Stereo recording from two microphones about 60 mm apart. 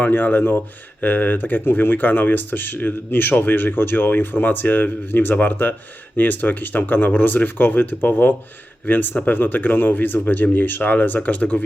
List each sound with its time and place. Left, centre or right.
0.0 s speech: left